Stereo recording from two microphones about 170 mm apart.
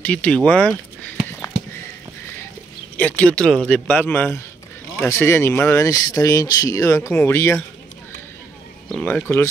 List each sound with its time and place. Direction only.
0.0 s speech: 5° left (ahead or behind)
1.4 s a sound: 15° left (ahead or behind)
3.0 s speech: 10° left (ahead or behind)
9.0 s speech: 15° left (ahead or behind)